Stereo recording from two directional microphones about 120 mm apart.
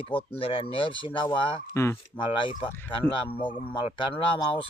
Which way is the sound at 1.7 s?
20° left (ahead or behind).